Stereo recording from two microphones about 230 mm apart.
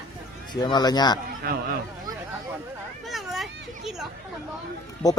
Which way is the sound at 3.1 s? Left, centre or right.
Centre.